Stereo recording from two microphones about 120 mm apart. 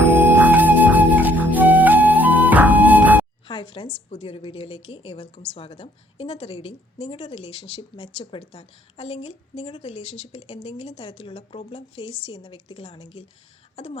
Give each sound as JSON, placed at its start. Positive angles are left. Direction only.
{"t": 0.0, "sound": "music", "side_deg": -15}
{"t": 3.4, "sound": "a sound", "side_deg": 45}
{"t": 4.1, "sound": "a woman's voice", "side_deg": 50}